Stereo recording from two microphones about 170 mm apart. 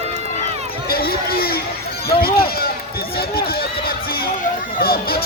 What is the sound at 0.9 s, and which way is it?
Run, 60° left (ahead or behind).